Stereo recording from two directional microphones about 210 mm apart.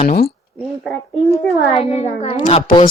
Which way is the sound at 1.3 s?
30° left (ahead or behind).